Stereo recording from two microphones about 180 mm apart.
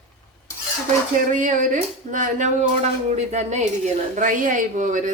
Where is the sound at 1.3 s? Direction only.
45° right (ahead or behind).